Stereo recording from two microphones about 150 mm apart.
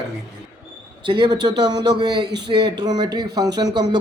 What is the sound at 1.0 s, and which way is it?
A man's voice, 30° right (ahead or behind).